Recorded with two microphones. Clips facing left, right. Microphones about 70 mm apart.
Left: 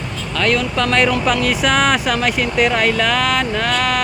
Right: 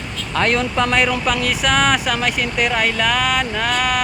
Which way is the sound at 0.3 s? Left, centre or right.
Right.